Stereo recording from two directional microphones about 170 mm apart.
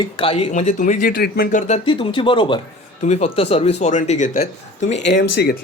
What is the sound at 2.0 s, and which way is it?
Speech, 30° left (ahead or behind).